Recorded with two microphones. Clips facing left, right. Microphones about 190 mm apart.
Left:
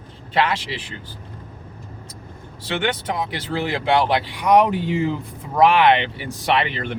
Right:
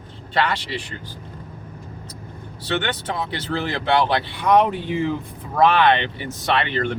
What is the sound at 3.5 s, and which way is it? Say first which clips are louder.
Speech: left 1 dB; 10° left (ahead or behind).